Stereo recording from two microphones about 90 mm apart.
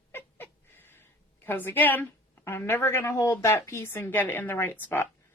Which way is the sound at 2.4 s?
25° left (ahead or behind).